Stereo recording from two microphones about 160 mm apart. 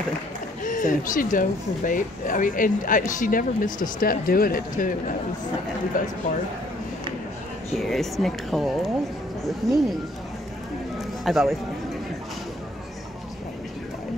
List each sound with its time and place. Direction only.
0.7 s speech: 55° left (ahead or behind)
7.7 s a woman's voice: centre (ahead or behind)
11.2 s a woman's voice: centre (ahead or behind)